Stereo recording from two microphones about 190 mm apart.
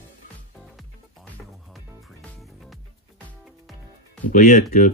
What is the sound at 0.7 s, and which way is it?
Music, centre (ahead or behind).